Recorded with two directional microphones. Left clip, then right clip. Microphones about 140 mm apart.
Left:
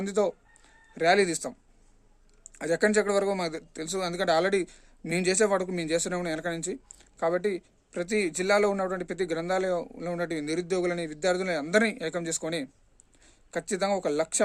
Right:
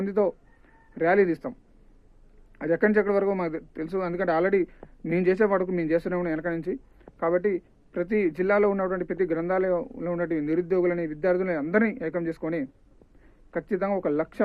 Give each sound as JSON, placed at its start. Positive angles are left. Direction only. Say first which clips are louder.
{"t": 0.0, "sound": "a man's voice", "louder": "right 2 dB", "side_deg": 30}
{"t": 2.6, "sound": "a man's voice", "louder": "right 2 dB", "side_deg": 30}